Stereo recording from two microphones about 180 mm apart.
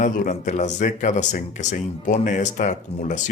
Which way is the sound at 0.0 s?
45° left (ahead or behind).